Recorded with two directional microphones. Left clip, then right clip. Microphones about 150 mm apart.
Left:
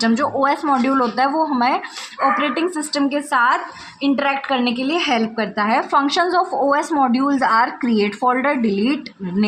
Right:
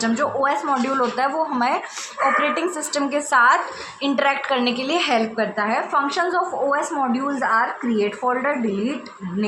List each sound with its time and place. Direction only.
0.0 s a woman's voice: 40° left (ahead or behind)